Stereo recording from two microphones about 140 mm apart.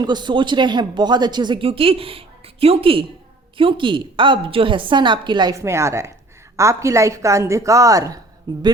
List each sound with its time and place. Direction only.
0.0 s a woman's voice: 30° right (ahead or behind)